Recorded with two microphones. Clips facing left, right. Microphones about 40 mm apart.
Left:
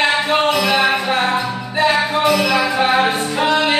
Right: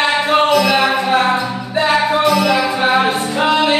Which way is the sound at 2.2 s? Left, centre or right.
Centre.